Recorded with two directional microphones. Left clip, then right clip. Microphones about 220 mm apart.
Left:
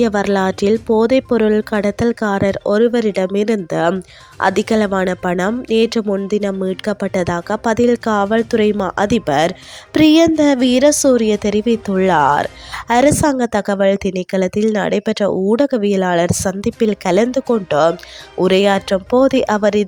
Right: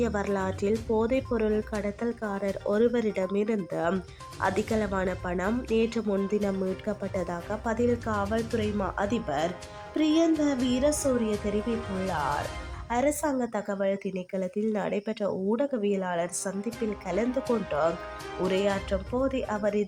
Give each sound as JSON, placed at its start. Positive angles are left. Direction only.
{"t": 0.0, "sound": "speech", "side_deg": 35}